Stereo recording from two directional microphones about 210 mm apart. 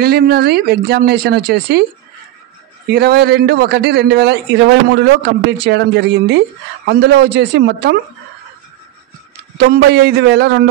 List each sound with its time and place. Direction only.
0.0 s a man's voice: 45° right (ahead or behind)
2.9 s a man's voice: 50° right (ahead or behind)
9.6 s a man's voice: 55° right (ahead or behind)